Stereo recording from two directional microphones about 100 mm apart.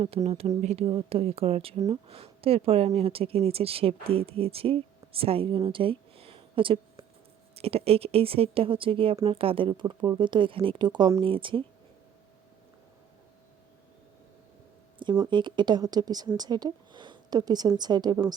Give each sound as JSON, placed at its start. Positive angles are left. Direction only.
{"t": 0.3, "sound": "speech", "side_deg": -90}
{"t": 2.0, "sound": "speech", "side_deg": -70}
{"t": 7.5, "sound": "speech", "side_deg": -80}
{"t": 9.8, "sound": "speech", "side_deg": -40}
{"t": 10.2, "sound": "speech", "side_deg": -55}
{"t": 11.2, "sound": "speech", "side_deg": -60}
{"t": 15.2, "sound": "speech", "side_deg": -50}